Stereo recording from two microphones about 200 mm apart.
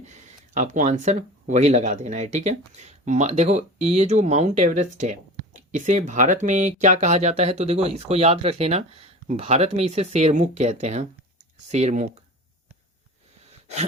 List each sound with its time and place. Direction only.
0.0 s speech: 35° right (ahead or behind)